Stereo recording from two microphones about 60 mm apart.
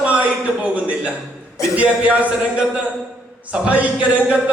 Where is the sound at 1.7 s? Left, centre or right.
Right.